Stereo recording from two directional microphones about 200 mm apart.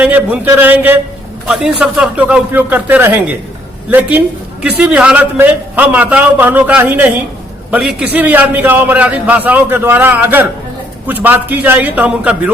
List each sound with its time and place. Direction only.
0.0 s a man's voice: 10° right (ahead or behind)